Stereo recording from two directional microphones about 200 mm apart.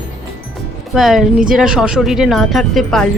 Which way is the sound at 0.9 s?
Centre (ahead or behind).